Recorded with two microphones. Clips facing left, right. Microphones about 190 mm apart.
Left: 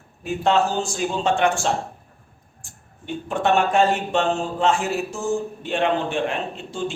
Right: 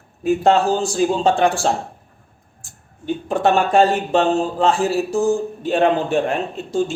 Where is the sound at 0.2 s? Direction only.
40° right (ahead or behind).